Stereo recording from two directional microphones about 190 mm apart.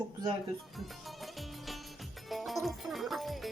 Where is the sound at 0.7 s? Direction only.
Centre (ahead or behind).